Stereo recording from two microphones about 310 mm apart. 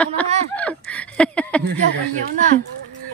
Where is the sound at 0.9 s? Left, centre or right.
Centre.